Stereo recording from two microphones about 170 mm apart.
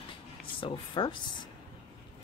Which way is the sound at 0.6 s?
30° left (ahead or behind).